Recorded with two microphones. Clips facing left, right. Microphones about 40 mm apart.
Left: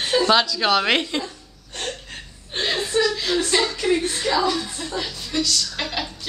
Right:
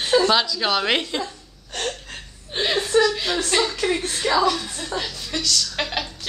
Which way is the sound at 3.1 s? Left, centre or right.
Right.